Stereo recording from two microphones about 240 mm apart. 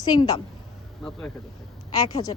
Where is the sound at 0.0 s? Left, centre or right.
Centre.